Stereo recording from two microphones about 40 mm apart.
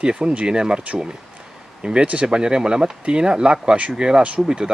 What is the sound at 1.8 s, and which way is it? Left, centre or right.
Speech, right.